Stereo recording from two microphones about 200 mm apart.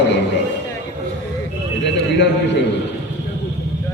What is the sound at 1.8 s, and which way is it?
Speech, 60° left (ahead or behind).